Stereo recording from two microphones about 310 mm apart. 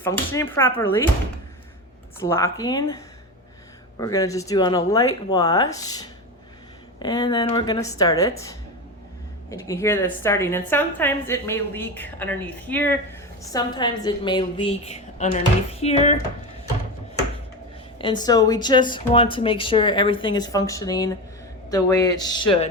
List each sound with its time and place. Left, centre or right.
0.0 s a woman's voice: centre
2.2 s a woman's voice: centre
17.9 s a woman's voice: centre